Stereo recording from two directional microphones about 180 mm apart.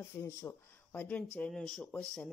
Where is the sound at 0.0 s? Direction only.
15° left (ahead or behind).